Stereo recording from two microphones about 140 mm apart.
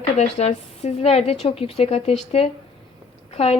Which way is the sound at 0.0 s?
50° left (ahead or behind).